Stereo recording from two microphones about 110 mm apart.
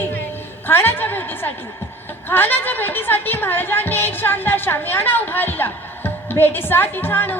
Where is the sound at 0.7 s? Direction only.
20° left (ahead or behind).